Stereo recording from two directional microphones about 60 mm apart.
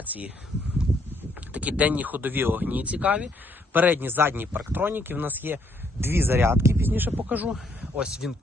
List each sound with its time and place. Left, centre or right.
1.5 s speech: right
3.7 s speech: right
7.5 s speech: centre